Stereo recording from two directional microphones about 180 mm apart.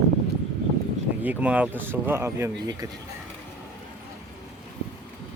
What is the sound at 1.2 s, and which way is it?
Speech, 10° right (ahead or behind).